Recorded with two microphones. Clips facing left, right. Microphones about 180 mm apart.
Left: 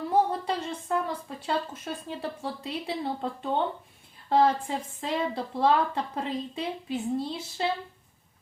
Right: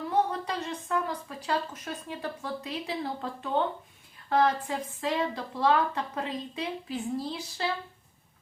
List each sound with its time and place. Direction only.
0.1 s a woman's voice: 30° left (ahead or behind)
4.3 s speech: 30° left (ahead or behind)